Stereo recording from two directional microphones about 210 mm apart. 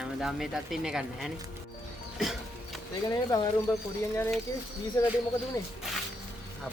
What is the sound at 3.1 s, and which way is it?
Speech, 20° left (ahead or behind).